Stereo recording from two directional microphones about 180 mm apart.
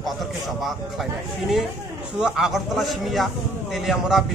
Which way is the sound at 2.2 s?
5° right (ahead or behind).